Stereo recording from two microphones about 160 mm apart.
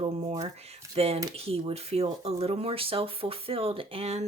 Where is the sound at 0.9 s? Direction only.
40° right (ahead or behind).